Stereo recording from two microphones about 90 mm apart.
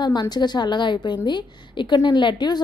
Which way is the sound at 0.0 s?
50° left (ahead or behind).